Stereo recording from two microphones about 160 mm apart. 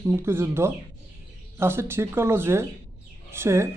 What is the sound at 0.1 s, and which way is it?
Speech, 15° right (ahead or behind).